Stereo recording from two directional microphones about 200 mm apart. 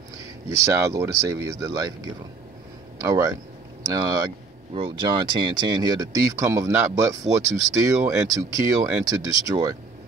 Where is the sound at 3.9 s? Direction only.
20° right (ahead or behind).